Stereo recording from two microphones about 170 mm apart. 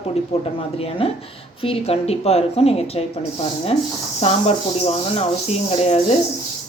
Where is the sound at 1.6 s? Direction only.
35° left (ahead or behind).